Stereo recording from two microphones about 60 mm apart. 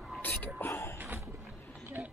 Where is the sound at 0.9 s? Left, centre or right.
Right.